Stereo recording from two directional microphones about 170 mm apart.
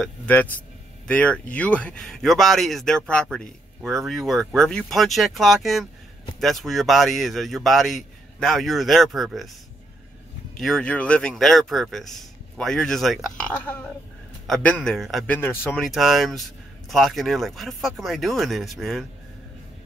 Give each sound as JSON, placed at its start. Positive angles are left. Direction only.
{"t": 0.0, "sound": "a man's voice", "side_deg": 10}
{"t": 10.6, "sound": "speech", "side_deg": 5}
{"t": 15.3, "sound": "speech", "side_deg": 15}
{"t": 15.8, "sound": "speech", "side_deg": 0}